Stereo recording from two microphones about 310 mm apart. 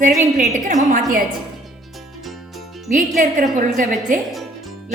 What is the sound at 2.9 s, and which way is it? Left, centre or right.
Speech, right.